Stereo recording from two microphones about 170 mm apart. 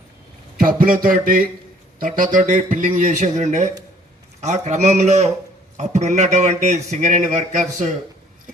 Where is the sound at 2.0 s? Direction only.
55° right (ahead or behind).